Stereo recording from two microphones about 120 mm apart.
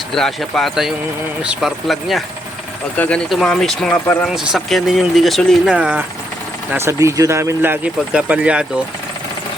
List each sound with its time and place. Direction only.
0.1 s speech: 5° left (ahead or behind)
3.2 s speech: centre (ahead or behind)
3.9 s speech: 15° left (ahead or behind)
4.4 s speech: centre (ahead or behind)
5.7 s speech: 10° right (ahead or behind)
6.7 s speech: 20° right (ahead or behind)